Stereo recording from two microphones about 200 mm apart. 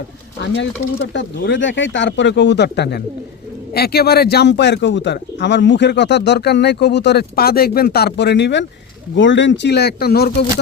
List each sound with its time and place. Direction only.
0.3 s speech: 65° left (ahead or behind)